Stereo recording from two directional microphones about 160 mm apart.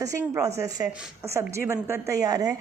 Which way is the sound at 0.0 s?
20° right (ahead or behind).